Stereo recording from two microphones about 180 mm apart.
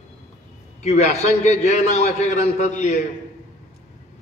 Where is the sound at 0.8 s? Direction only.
40° left (ahead or behind).